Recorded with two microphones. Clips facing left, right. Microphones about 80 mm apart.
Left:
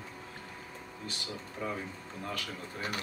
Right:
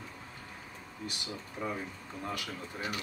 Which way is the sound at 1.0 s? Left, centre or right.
Centre.